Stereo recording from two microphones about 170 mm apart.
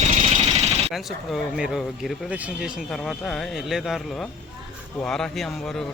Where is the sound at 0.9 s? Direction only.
5° right (ahead or behind).